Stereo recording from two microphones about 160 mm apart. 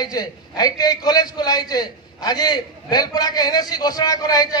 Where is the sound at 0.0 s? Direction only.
25° left (ahead or behind).